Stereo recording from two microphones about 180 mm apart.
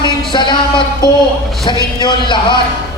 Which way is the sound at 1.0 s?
20° left (ahead or behind).